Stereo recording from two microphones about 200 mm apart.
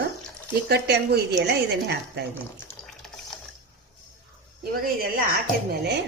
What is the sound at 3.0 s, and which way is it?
Water, centre (ahead or behind).